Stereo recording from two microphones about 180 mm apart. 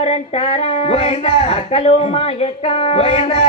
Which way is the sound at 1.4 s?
35° left (ahead or behind).